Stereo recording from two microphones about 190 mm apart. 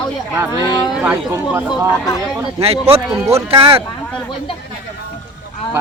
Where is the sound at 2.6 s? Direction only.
30° right (ahead or behind).